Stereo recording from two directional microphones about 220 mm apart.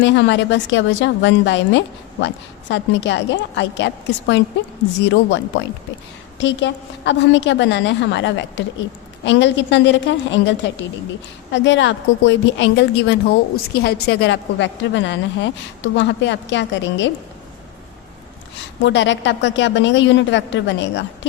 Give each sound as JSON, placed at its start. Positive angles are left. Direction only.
{"t": 0.0, "sound": "a woman's voice", "side_deg": 55}
{"t": 6.4, "sound": "a woman's voice", "side_deg": 55}
{"t": 18.8, "sound": "a woman's voice", "side_deg": 55}